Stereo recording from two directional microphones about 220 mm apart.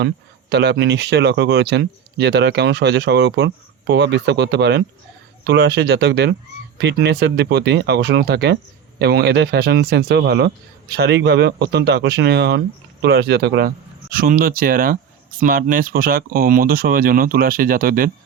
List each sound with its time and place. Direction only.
0.5 s speech: 50° right (ahead or behind)